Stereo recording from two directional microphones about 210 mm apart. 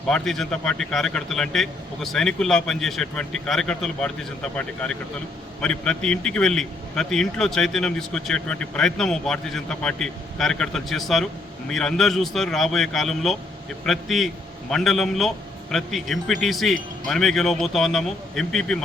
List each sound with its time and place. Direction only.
0.1 s a man's voice: centre (ahead or behind)